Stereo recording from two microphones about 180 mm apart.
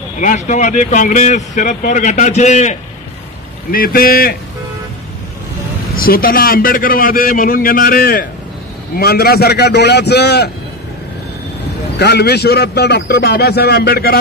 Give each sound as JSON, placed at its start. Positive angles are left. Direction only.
{"t": 0.2, "sound": "speech", "side_deg": 45}
{"t": 3.7, "sound": "a man's voice", "side_deg": 55}
{"t": 5.9, "sound": "a man's voice", "side_deg": 55}
{"t": 12.0, "sound": "a man's voice", "side_deg": 65}